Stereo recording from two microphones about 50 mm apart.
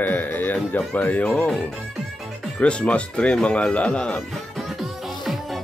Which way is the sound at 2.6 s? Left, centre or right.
Left.